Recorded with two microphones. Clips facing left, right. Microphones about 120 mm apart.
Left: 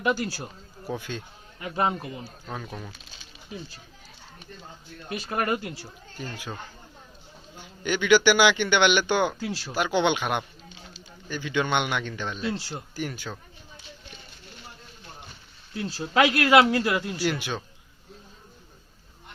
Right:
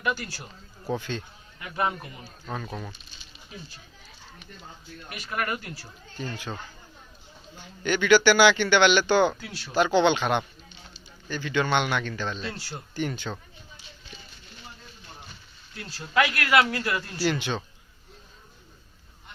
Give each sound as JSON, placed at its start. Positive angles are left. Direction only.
{"t": 0.0, "sound": "speech", "side_deg": 30}
{"t": 0.9, "sound": "a man's voice", "side_deg": 10}
{"t": 1.5, "sound": "speech", "side_deg": 30}
{"t": 2.5, "sound": "speech", "side_deg": 5}
{"t": 5.0, "sound": "speech", "side_deg": 30}
{"t": 6.1, "sound": "a man's voice", "side_deg": 10}
{"t": 7.5, "sound": "a man's voice", "side_deg": 15}
{"t": 9.4, "sound": "speech", "side_deg": 30}
{"t": 9.7, "sound": "a man's voice", "side_deg": 10}
{"t": 13.0, "sound": "speech", "side_deg": 5}
{"t": 15.7, "sound": "a man's voice", "side_deg": 25}